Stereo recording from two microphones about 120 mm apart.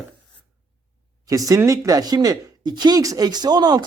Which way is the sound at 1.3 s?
30° right (ahead or behind).